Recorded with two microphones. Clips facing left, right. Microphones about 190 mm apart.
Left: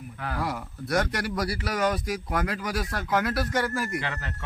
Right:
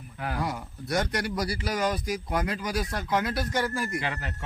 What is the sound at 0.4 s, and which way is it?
Speech, centre (ahead or behind).